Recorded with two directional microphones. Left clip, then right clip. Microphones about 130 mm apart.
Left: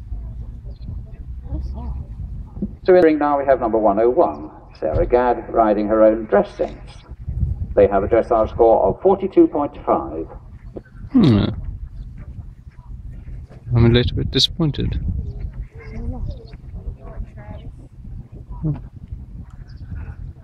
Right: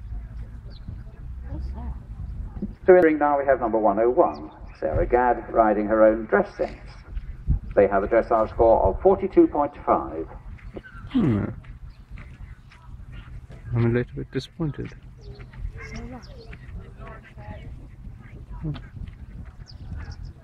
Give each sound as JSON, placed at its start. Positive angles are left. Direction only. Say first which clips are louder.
{"t": 2.8, "sound": "a man's voice", "louder": "left 3 dB", "side_deg": 45}
{"t": 13.7, "sound": "speech", "louder": "left 8 dB", "side_deg": 25}
{"t": 15.3, "sound": "goose", "louder": "left 2 dB", "side_deg": -25}